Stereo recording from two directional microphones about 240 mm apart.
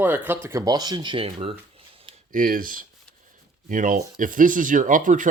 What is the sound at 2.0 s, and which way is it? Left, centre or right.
Speech, right.